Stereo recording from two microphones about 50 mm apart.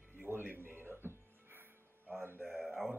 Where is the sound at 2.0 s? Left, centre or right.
Right.